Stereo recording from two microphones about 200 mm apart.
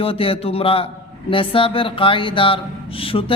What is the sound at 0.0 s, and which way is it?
Speech, 30° left (ahead or behind).